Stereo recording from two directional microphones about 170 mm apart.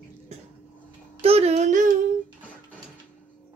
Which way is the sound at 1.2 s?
35° right (ahead or behind).